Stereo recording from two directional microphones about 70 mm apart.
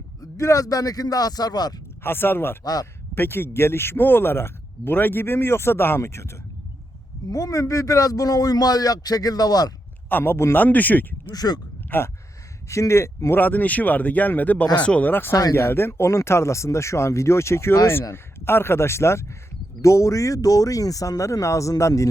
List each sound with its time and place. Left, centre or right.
0.2 s speech: left
2.0 s speech: left
7.3 s speech: left
10.1 s speech: left
11.3 s speech: left
11.9 s speech: left
12.6 s speech: left
13.4 s speech: left